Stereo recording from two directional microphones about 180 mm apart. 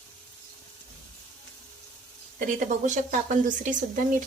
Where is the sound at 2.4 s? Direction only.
45° right (ahead or behind).